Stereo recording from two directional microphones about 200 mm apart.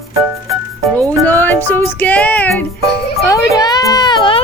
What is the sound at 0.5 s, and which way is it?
Music, 5° left (ahead or behind).